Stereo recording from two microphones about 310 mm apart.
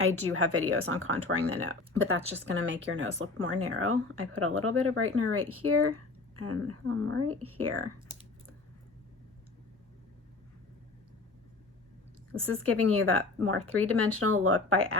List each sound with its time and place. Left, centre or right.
0.0 s speech: right
12.3 s speech: right